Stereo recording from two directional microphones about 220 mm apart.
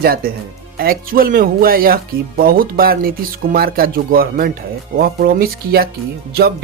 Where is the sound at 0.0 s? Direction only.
45° right (ahead or behind).